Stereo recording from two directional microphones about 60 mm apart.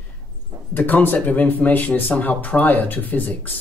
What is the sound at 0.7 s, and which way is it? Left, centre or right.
Speech, left.